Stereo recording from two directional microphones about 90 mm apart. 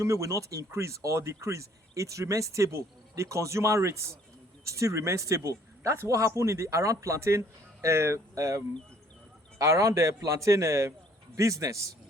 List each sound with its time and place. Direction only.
0.0 s speech: 35° right (ahead or behind)